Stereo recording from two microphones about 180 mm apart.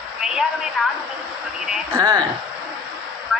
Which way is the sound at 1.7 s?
15° right (ahead or behind).